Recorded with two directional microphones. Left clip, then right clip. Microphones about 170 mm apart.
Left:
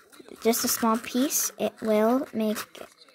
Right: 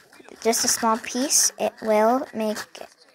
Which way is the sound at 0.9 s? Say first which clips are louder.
Right 4 dB; 45° left (ahead or behind).